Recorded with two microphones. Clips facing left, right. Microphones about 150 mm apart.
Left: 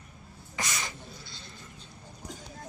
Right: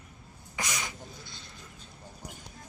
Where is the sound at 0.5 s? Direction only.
10° right (ahead or behind).